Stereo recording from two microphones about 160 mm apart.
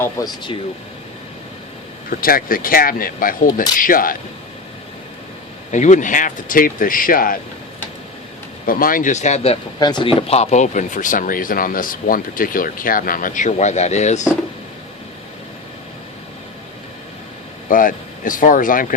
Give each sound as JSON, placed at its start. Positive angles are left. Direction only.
{"t": 0.2, "sound": "speech", "side_deg": 20}
{"t": 2.0, "sound": "speech", "side_deg": 65}
{"t": 5.7, "sound": "speech", "side_deg": 50}
{"t": 8.6, "sound": "speech", "side_deg": 60}
{"t": 9.8, "sound": "speech", "side_deg": 30}
{"t": 17.7, "sound": "speech", "side_deg": 55}